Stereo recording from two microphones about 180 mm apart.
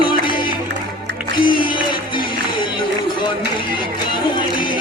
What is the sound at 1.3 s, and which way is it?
Music, 25° left (ahead or behind).